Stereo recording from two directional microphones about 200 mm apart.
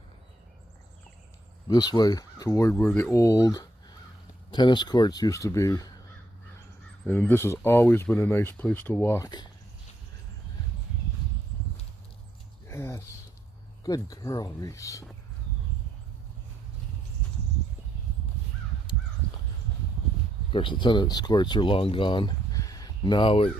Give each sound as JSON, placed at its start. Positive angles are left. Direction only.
{"t": 1.6, "sound": "speech", "side_deg": 20}
{"t": 7.1, "sound": "speech", "side_deg": 10}
{"t": 12.6, "sound": "a sound", "side_deg": 15}
{"t": 13.8, "sound": "speech", "side_deg": 20}
{"t": 18.9, "sound": "crow", "side_deg": 20}
{"t": 20.5, "sound": "speech", "side_deg": 25}